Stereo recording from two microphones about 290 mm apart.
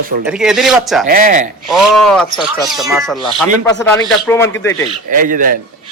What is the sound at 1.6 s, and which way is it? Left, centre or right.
A man's voice, centre.